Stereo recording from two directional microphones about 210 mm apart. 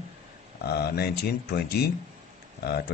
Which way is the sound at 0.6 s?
50° left (ahead or behind).